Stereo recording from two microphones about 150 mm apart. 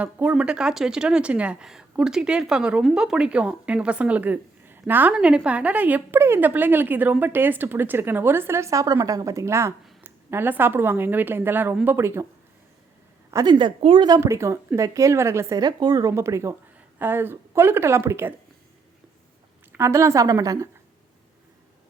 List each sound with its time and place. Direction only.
0.0 s speech: 10° right (ahead or behind)
13.3 s speech: 30° right (ahead or behind)
19.7 s speech: 20° right (ahead or behind)